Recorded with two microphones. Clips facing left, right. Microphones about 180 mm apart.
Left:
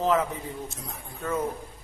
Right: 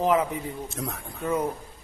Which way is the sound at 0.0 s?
15° right (ahead or behind).